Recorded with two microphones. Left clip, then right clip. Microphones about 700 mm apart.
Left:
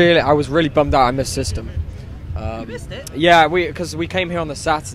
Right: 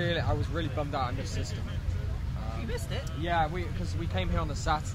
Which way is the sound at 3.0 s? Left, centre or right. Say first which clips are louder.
Left 18 dB; left.